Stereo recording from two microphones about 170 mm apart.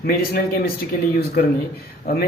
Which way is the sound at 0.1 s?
65° left (ahead or behind).